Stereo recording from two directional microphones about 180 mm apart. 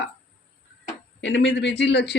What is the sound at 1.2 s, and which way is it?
Speech, 80° left.